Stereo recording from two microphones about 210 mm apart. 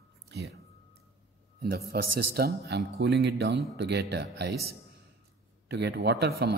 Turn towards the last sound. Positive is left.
turn(degrees=-50)  # may be behind; listen again after turning